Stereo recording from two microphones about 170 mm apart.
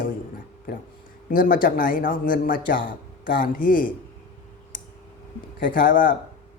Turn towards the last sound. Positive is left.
turn(degrees=55)  # may be behind; listen again after turning